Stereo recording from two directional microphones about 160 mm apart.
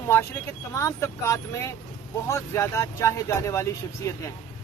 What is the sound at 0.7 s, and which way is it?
Speech, 20° left (ahead or behind).